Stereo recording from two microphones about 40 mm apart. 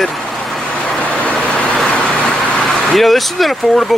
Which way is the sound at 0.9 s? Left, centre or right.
Left.